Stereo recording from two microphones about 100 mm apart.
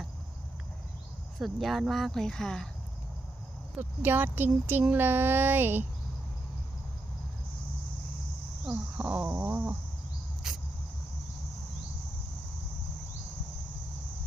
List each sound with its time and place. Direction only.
1.4 s speech: centre (ahead or behind)
3.8 s speech: 20° right (ahead or behind)
8.6 s a sound: 10° right (ahead or behind)
9.3 s speech: 20° right (ahead or behind)